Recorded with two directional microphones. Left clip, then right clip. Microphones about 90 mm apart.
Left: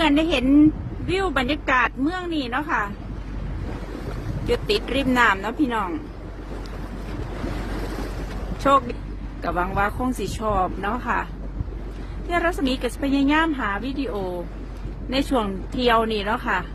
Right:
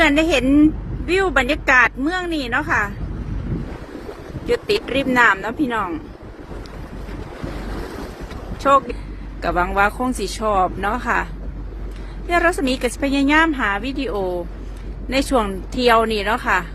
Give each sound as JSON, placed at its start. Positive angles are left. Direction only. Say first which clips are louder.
{"t": 0.0, "sound": "a woman's voice", "louder": "right 4 dB", "side_deg": -30}
{"t": 4.4, "sound": "a woman's voice", "louder": "right 3 dB", "side_deg": -30}
{"t": 9.4, "sound": "a woman's voice", "louder": "right 6 dB", "side_deg": -50}
{"t": 12.3, "sound": "a woman's voice", "louder": "right 5 dB", "side_deg": -45}